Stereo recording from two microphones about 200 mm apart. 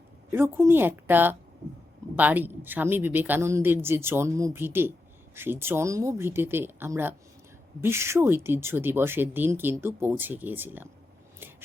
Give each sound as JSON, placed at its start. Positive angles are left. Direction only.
{"t": 0.3, "sound": "speech", "side_deg": -10}